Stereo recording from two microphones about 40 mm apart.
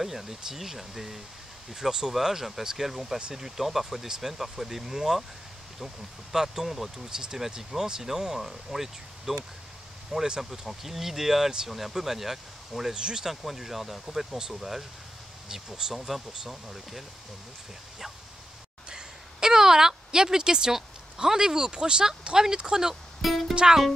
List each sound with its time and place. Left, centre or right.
0.0 s speech: centre
6.3 s speech: centre
10.1 s speech: centre
10.4 s speech: centre
12.9 s speech: right
13.2 s speech: centre
18.9 s speech: centre